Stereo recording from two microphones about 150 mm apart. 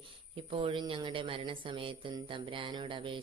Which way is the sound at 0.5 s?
35° right (ahead or behind).